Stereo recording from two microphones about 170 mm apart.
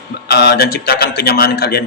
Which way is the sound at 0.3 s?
75° left (ahead or behind).